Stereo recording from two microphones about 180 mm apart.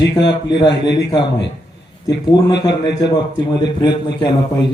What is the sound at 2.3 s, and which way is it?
Speech, 25° left (ahead or behind).